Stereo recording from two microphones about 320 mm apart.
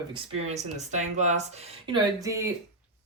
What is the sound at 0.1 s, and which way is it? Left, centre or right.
Speech, centre.